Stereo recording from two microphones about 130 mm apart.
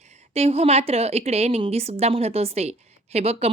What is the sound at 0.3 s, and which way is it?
A woman's voice, 50° right (ahead or behind).